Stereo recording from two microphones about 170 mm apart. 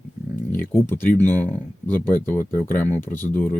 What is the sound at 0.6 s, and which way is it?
Speech, 15° left (ahead or behind).